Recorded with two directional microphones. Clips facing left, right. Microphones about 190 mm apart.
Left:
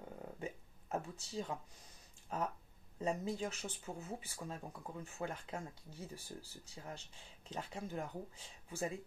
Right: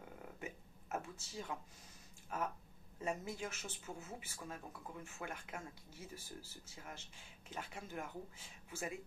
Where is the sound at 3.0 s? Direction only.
35° left (ahead or behind).